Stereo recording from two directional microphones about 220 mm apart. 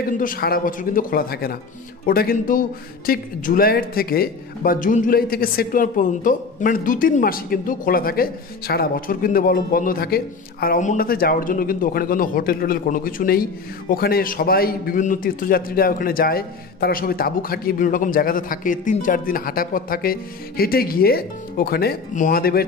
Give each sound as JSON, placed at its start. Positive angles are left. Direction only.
{"t": 0.0, "sound": "speech", "side_deg": 40}